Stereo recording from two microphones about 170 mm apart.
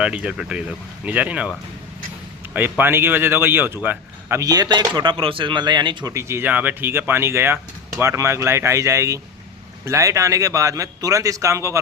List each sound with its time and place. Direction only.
0.0 s speech: 5° right (ahead or behind); by 6.1 s 25° right (ahead or behind)
6.1 s speech: 15° right (ahead or behind)